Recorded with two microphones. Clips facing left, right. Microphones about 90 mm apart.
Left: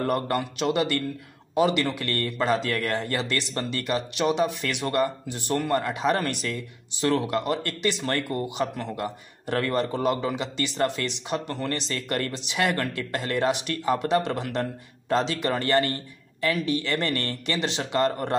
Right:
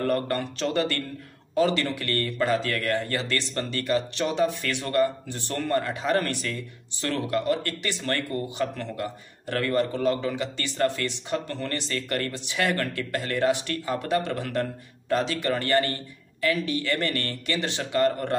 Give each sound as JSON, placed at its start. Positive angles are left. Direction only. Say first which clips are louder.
{"t": 0.0, "sound": "speech", "louder": "even", "side_deg": 15}